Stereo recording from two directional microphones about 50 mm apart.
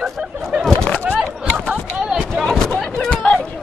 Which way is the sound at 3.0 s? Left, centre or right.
Centre.